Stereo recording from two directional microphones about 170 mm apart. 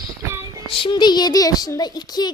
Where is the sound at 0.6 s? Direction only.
25° left (ahead or behind).